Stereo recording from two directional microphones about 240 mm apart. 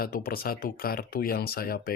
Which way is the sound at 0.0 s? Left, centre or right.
Left.